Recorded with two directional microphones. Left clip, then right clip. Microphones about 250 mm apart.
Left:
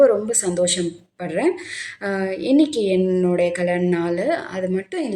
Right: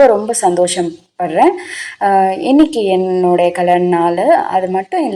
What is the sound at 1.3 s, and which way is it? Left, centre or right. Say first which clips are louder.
Speech: right 10 dB; centre.